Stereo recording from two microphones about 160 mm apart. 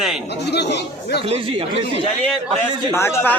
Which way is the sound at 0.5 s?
90° left.